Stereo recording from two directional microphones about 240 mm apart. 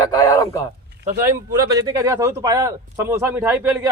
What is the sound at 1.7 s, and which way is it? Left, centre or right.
Speech, centre.